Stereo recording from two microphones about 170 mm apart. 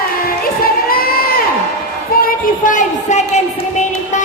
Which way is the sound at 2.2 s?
55° left (ahead or behind).